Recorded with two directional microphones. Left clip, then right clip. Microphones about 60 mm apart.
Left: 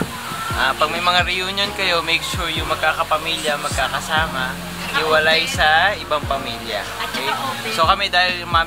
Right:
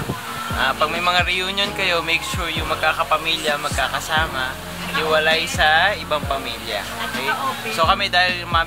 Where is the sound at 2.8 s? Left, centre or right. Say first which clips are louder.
Even; right.